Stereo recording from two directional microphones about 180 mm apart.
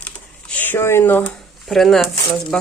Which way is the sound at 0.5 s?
10° left (ahead or behind).